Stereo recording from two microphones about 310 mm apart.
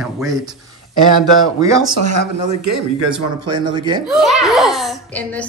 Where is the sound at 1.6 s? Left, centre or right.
Centre.